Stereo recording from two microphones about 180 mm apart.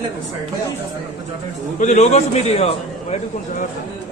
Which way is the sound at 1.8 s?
40° left (ahead or behind).